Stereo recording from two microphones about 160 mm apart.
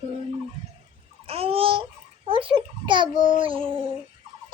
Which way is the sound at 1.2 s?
35° right (ahead or behind).